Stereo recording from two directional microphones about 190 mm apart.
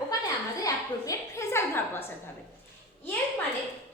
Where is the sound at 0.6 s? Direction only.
15° left (ahead or behind).